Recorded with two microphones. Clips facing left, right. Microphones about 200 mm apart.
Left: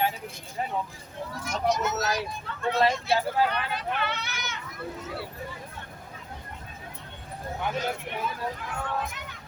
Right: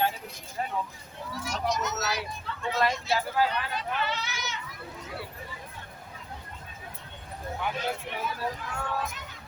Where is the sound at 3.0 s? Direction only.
60° left (ahead or behind).